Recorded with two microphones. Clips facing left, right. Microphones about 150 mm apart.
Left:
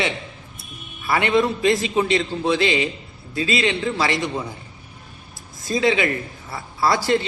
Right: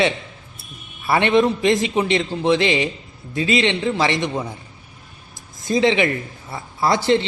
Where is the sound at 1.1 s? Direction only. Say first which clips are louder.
Right 3 dB; 25° right (ahead or behind).